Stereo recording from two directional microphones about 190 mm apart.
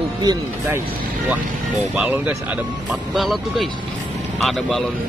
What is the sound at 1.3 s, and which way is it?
Speech, 10° right (ahead or behind).